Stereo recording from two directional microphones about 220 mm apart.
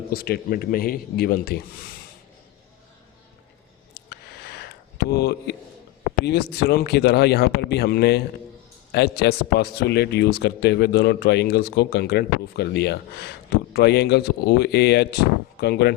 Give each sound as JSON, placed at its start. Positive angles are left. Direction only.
{"t": 0.1, "sound": "a man's voice", "side_deg": 45}
{"t": 3.9, "sound": "a sound", "side_deg": 45}
{"t": 6.2, "sound": "a man's voice", "side_deg": 45}